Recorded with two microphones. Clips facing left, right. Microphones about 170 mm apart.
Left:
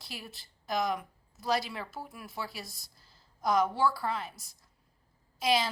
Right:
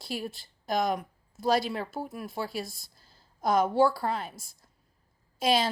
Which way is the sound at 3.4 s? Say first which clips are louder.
Right 4 dB; 55° right (ahead or behind).